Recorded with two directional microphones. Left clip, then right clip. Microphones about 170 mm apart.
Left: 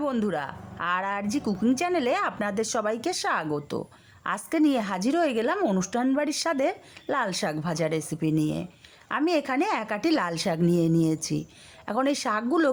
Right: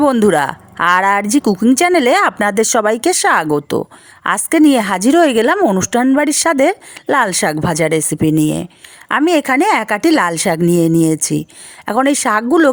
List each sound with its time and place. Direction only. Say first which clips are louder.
0.0 s speech: right 16 dB; 60° right (ahead or behind)